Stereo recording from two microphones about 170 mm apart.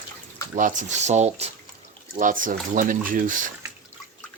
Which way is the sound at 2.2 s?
50° right (ahead or behind).